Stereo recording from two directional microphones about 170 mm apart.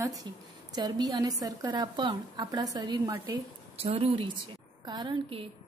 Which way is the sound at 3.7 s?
35° right (ahead or behind).